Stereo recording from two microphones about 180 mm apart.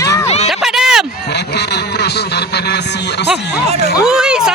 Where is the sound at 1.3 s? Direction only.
65° left (ahead or behind).